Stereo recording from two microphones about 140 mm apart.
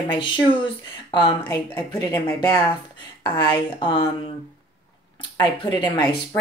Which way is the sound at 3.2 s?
30° left (ahead or behind).